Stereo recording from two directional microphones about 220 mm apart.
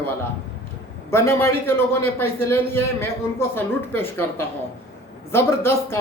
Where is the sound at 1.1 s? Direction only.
10° left (ahead or behind).